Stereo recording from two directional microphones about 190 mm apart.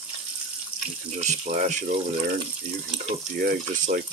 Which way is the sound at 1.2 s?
40° right (ahead or behind).